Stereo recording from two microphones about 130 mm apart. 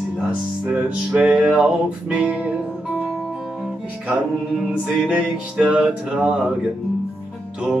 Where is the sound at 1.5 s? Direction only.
10° right (ahead or behind).